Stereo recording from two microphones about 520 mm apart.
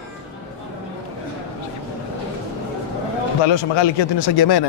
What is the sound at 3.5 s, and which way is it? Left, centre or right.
A man's voice, left.